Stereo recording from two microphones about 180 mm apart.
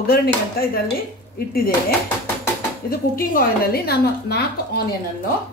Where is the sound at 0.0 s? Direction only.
60° left (ahead or behind).